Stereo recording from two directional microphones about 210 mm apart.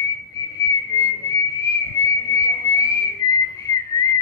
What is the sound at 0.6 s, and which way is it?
Whistle, 15° left (ahead or behind).